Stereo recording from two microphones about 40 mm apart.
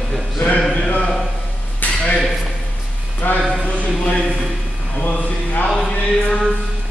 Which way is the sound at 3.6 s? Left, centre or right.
Left.